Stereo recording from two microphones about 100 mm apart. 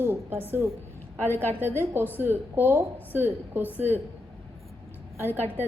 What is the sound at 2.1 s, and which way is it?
A woman's voice, 20° right (ahead or behind).